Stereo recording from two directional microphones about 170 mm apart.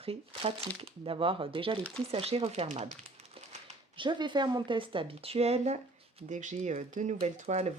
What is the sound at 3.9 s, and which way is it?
Speech, 30° right (ahead or behind).